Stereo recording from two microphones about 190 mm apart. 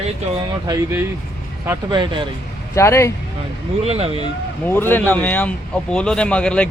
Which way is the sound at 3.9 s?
30° right (ahead or behind).